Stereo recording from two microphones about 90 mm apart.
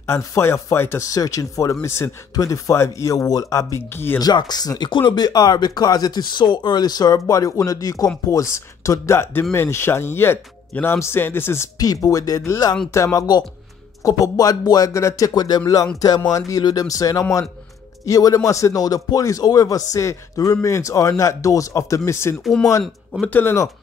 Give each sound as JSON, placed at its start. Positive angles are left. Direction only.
{"t": 0.0, "sound": "speech", "side_deg": 30}
{"t": 3.9, "sound": "speech", "side_deg": 25}
{"t": 4.2, "sound": "speech", "side_deg": 50}
{"t": 11.8, "sound": "speech", "side_deg": 40}
{"t": 14.9, "sound": "speech", "side_deg": 35}
{"t": 22.4, "sound": "speech", "side_deg": 5}
{"t": 23.2, "sound": "speech", "side_deg": 20}